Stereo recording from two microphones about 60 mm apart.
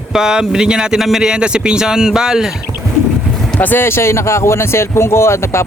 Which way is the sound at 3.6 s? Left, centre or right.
Left.